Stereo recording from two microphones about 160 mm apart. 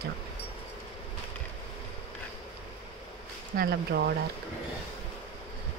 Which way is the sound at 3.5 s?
85° right.